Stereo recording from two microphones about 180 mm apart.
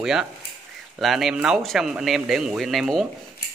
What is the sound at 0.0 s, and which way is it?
Speech, 5° right (ahead or behind).